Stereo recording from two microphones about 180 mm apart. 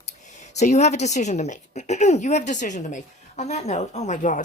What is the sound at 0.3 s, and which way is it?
A woman's voice, 40° left (ahead or behind).